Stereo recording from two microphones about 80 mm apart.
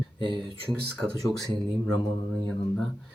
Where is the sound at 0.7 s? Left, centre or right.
Centre.